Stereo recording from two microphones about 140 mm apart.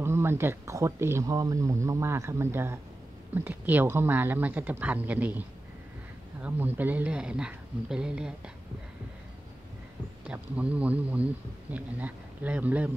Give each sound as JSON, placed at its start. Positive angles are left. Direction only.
{"t": 0.0, "sound": "speech", "side_deg": -15}
{"t": 6.4, "sound": "speech", "side_deg": -10}
{"t": 10.2, "sound": "a man's voice", "side_deg": -10}